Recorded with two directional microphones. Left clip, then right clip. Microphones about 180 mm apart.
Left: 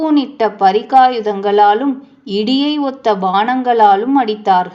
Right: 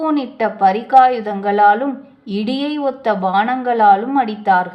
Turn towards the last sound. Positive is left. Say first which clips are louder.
# left 2 dB
turn(degrees=30)  # may be behind; listen again after turning